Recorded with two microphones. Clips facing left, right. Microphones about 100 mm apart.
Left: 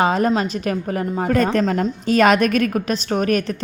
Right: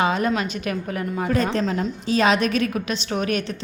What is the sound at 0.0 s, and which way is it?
A woman's voice, 40° left (ahead or behind).